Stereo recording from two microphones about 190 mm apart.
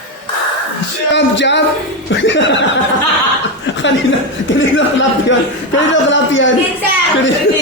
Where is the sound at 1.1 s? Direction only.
70° left (ahead or behind).